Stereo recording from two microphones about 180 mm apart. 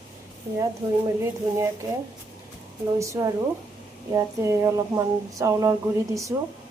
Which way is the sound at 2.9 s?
15° right (ahead or behind).